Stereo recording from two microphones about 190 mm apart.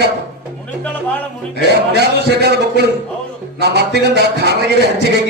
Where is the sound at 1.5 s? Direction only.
60° right (ahead or behind).